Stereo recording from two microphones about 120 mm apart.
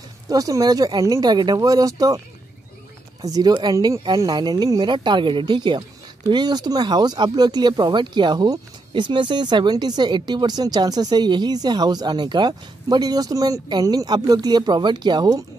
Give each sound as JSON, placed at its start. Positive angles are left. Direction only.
{"t": 0.3, "sound": "speech", "side_deg": -30}